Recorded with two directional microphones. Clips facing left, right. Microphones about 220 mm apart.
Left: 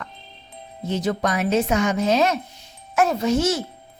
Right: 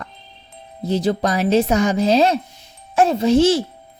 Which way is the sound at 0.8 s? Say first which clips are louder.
Right 4 dB; 35° right (ahead or behind).